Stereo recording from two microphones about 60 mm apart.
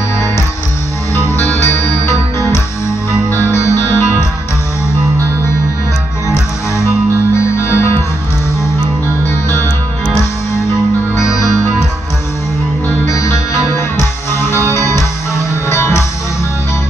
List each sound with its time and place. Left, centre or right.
1.6 s music: left
3.1 s music: left
6.2 s music: left
11.1 s music: left
13.0 s music: left
14.7 s music: left